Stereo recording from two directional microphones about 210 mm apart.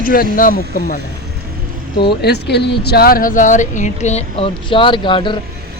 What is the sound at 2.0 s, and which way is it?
Speech, 50° left (ahead or behind).